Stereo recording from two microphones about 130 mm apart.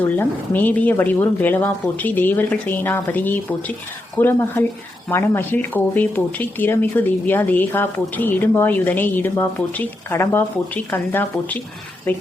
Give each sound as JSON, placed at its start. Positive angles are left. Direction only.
{"t": 0.0, "sound": "speech", "side_deg": 15}